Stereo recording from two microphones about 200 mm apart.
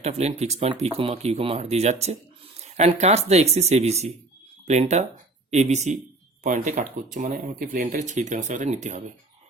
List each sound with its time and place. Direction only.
0.0 s speech: 30° right (ahead or behind)